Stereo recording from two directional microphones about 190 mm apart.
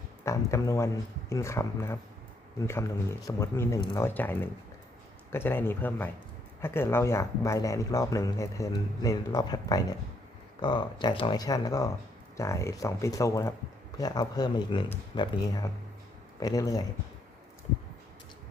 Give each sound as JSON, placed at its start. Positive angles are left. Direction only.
{"t": 0.3, "sound": "speech", "side_deg": 15}